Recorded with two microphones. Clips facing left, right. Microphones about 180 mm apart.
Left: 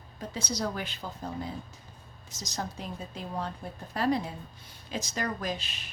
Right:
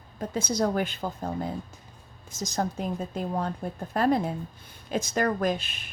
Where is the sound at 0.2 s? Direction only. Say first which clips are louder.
Right 7 dB; 50° right (ahead or behind).